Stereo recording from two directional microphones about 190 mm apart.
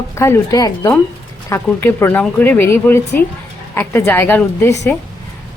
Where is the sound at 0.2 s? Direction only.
15° left (ahead or behind).